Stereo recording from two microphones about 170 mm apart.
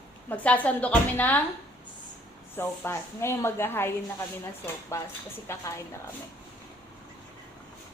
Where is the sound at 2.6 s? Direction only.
15° left (ahead or behind).